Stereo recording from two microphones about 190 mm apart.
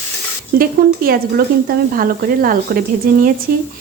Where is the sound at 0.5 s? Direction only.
50° right (ahead or behind).